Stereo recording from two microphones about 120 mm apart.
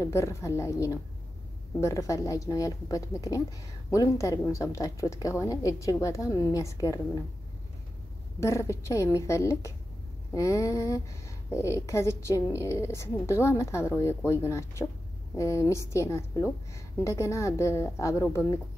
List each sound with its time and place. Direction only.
0.0 s a woman's voice: 25° left (ahead or behind)
8.4 s a woman's voice: 25° left (ahead or behind)